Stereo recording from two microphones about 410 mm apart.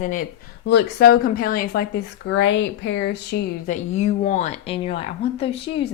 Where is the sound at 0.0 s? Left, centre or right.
Centre.